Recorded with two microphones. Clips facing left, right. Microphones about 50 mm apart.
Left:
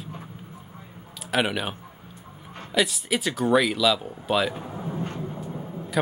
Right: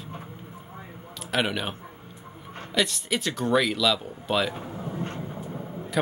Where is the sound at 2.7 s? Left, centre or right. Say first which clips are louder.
Left 2 dB; centre.